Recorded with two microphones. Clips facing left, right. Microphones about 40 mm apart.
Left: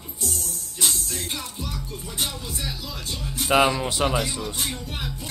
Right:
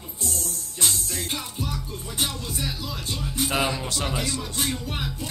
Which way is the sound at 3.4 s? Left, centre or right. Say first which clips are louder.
Left 6 dB; left.